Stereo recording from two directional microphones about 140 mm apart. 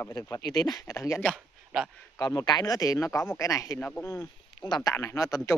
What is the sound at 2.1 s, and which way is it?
Speech, 25° left (ahead or behind).